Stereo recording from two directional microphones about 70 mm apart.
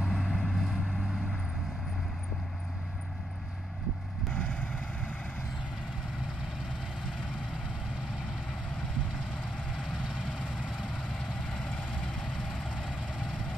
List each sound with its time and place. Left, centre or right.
0.0 s vehicle: centre
4.3 s vehicle: left
9.7 s vehicle: centre
11.0 s vehicle: centre